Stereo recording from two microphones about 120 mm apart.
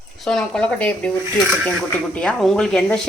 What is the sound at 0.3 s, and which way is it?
Speech, 5° left (ahead or behind).